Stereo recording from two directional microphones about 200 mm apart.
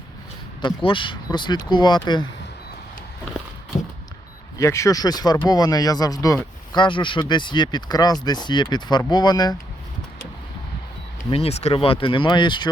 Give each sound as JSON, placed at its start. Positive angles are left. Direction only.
{"t": 0.6, "sound": "speech", "side_deg": 25}
{"t": 4.5, "sound": "speech", "side_deg": 15}
{"t": 11.3, "sound": "speech", "side_deg": 30}